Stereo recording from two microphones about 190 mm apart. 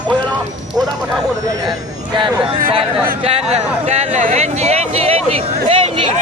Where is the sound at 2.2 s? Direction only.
25° right (ahead or behind).